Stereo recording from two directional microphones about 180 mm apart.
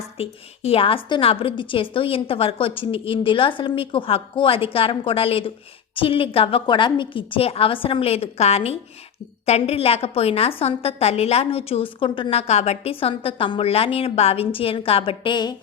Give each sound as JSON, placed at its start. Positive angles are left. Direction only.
{"t": 0.2, "sound": "a woman's voice", "side_deg": 30}